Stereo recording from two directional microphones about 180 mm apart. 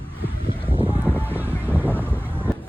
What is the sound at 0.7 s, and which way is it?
Goose, 30° right (ahead or behind).